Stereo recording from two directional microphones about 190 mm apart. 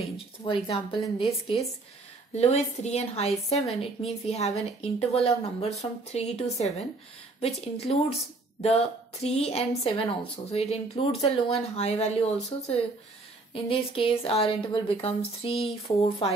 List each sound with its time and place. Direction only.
0.5 s speech: 30° left (ahead or behind)
3.5 s speech: centre (ahead or behind)
4.0 s speech: 35° left (ahead or behind)